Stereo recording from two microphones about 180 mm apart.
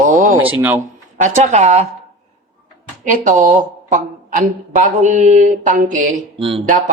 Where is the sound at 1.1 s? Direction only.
45° right (ahead or behind).